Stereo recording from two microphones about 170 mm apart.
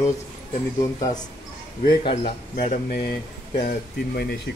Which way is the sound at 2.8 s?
65° left (ahead or behind).